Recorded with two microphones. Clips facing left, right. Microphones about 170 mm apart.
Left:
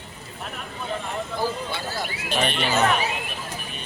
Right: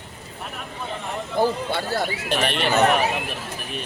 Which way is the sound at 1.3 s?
55° right (ahead or behind).